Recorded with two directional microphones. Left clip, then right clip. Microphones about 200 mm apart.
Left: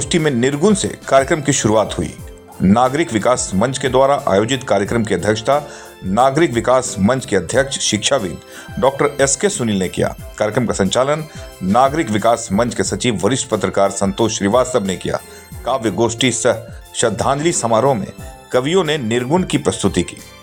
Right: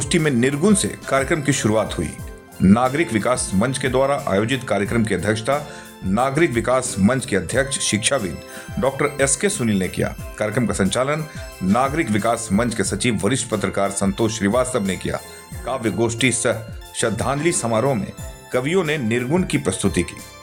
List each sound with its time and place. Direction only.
0.0 s speech: centre (ahead or behind)